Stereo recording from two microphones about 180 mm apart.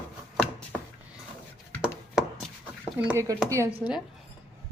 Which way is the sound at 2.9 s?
10° right (ahead or behind).